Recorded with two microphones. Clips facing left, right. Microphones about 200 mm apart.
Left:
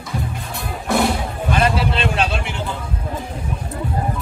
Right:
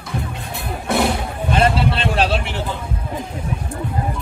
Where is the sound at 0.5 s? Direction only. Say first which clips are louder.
Even; centre (ahead or behind).